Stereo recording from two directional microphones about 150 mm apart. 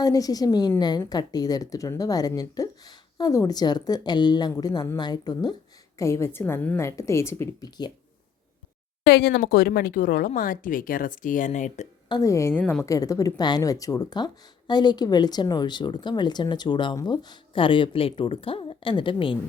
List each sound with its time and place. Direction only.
0.0 s a woman's voice: 25° left (ahead or behind)
9.0 s a woman's voice: 90° left; by 11.9 s 55° left (ahead or behind)
12.0 s speech: 25° left (ahead or behind)